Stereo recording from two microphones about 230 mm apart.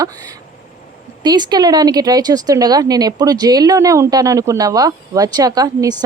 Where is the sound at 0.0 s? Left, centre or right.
Centre.